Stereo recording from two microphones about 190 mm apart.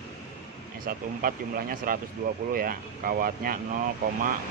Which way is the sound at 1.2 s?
45° right (ahead or behind).